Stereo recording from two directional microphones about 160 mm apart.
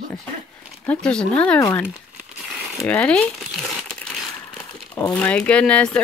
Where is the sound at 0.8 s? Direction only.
5° left (ahead or behind).